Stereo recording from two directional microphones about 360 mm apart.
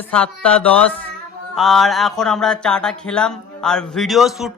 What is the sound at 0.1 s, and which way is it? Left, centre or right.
A man's voice, centre.